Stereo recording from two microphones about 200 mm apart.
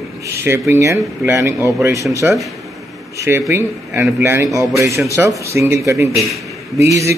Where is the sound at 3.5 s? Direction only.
10° right (ahead or behind).